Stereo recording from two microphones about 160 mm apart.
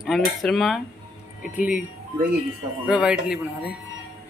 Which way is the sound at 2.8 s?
5° right (ahead or behind).